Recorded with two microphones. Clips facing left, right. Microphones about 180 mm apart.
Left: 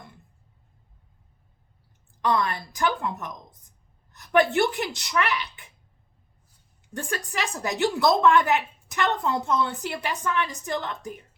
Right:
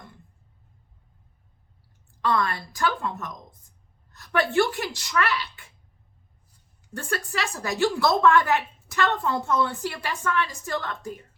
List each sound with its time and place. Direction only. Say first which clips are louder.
2.2 s a woman's voice: even; 20° left (ahead or behind)
6.9 s a woman's voice: right 1 dB; 15° left (ahead or behind)